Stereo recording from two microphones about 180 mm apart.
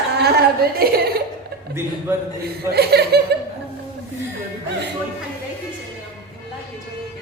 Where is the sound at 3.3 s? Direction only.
65° right (ahead or behind).